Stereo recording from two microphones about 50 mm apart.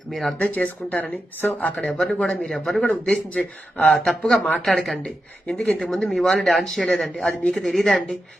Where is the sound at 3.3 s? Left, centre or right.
Left.